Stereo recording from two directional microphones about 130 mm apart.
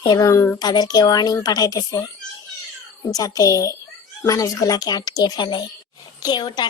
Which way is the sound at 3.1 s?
30° left (ahead or behind).